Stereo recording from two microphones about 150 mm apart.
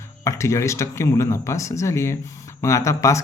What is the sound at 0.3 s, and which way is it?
Speech, 20° left (ahead or behind).